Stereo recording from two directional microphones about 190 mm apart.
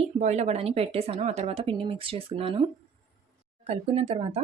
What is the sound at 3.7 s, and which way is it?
Speech, 30° right (ahead or behind).